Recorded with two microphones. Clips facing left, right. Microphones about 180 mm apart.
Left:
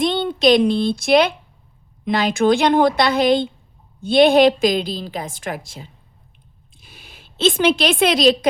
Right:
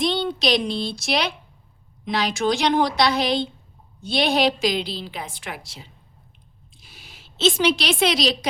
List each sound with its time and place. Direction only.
0.0 s a woman's voice: 50° left (ahead or behind)